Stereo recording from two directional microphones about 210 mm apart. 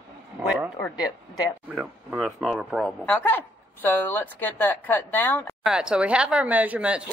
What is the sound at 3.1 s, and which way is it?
A woman's voice, 10° left (ahead or behind).